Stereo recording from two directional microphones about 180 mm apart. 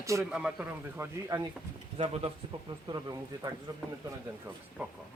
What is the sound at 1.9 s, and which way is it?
Speech, 30° right (ahead or behind).